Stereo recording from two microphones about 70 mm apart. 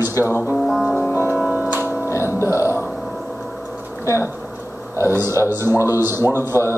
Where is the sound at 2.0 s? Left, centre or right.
Left.